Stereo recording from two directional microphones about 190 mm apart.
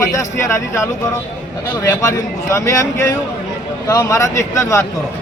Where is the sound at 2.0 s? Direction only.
15° left (ahead or behind).